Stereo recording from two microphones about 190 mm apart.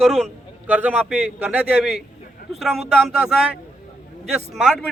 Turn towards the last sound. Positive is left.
turn(degrees=0)  # may be behind; listen again after turning